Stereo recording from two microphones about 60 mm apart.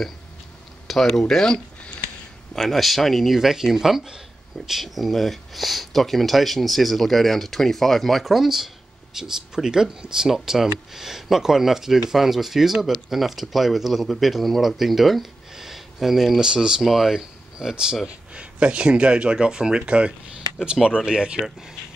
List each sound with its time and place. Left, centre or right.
0.8 s speech: centre